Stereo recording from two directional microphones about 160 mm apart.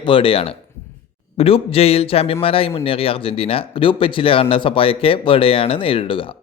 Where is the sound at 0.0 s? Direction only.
35° left (ahead or behind).